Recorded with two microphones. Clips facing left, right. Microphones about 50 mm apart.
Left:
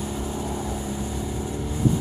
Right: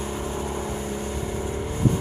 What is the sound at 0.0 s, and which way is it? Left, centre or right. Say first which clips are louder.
Vehicle: even; right.